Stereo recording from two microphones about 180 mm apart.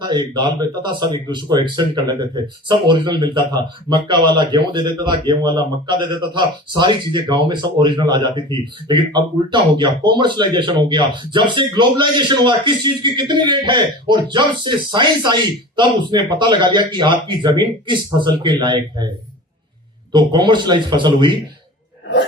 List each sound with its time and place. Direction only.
0.0 s speech: 25° right (ahead or behind)
20.1 s speech: 25° right (ahead or behind)